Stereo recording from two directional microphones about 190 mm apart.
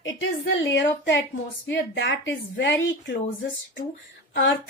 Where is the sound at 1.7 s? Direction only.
70° left (ahead or behind).